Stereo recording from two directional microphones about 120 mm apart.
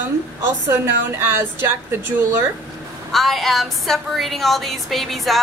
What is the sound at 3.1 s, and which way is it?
A woman's voice, centre (ahead or behind).